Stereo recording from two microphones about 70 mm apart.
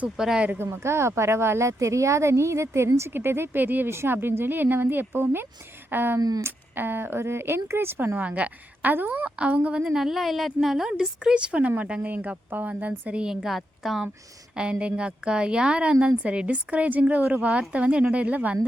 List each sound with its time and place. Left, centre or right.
0.2 s a woman's voice: centre
0.6 s speech: right
6.1 s speech: right
6.4 s speech: right; by 14.1 s centre
14.5 s a woman's voice: centre